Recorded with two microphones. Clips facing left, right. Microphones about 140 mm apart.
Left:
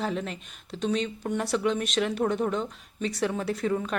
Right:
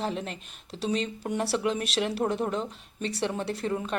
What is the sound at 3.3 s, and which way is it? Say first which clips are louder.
Speech: left 2 dB; 30° right (ahead or behind).